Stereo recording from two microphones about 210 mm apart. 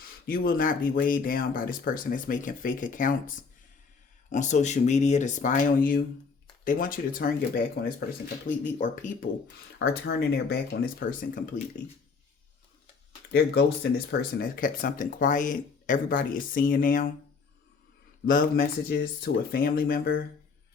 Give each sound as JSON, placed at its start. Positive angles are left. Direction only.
{"t": 0.0, "sound": "speech", "side_deg": 45}
{"t": 9.7, "sound": "speech", "side_deg": 55}
{"t": 14.1, "sound": "speech", "side_deg": 45}
{"t": 18.3, "sound": "speech", "side_deg": 45}